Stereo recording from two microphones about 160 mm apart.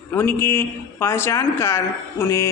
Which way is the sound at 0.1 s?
15° left (ahead or behind).